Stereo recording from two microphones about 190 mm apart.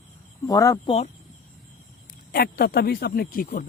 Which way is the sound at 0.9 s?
35° left (ahead or behind).